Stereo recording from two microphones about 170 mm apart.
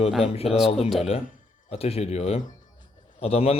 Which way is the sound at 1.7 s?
35° left (ahead or behind).